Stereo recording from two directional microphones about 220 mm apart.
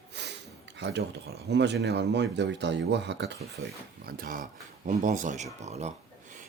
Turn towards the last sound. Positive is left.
turn(degrees=-30)  # may be behind; listen again after turning